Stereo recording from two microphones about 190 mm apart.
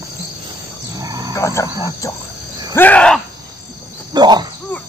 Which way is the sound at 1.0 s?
20° right (ahead or behind).